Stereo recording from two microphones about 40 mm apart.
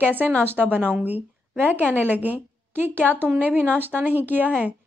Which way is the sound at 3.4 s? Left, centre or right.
Right.